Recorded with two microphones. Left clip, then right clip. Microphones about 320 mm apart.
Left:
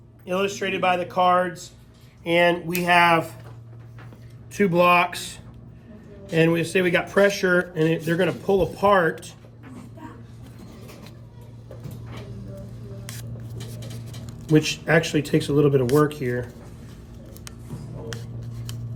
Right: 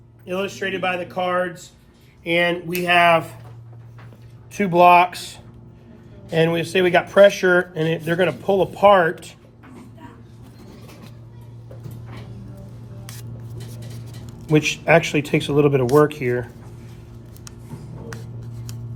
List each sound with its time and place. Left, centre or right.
0.3 s speech: left
2.8 s speech: centre
4.6 s speech: centre
14.5 s speech: centre
18.1 s a sound: centre